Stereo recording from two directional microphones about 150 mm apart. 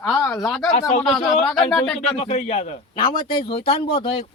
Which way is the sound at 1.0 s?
Centre (ahead or behind).